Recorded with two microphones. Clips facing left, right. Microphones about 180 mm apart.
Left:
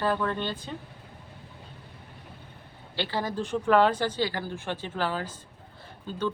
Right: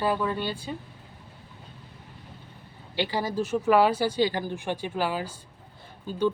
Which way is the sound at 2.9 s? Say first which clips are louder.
Right 3 dB; 15° right (ahead or behind).